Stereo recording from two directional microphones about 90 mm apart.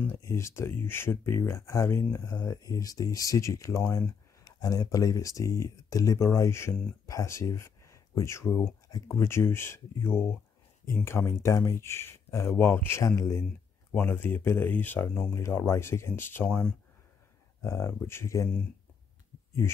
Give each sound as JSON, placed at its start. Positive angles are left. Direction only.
{"t": 0.2, "sound": "speech", "side_deg": 30}
{"t": 9.1, "sound": "speech", "side_deg": 30}
{"t": 13.9, "sound": "speech", "side_deg": 25}
{"t": 15.3, "sound": "speech", "side_deg": 30}
{"t": 17.6, "sound": "speech", "side_deg": 35}